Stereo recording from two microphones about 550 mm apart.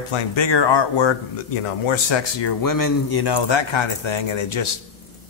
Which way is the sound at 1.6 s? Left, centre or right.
Left.